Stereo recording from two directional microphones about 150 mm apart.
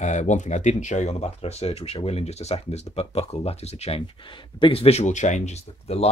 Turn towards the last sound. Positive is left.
turn(degrees=45)  # may be behind; listen again after turning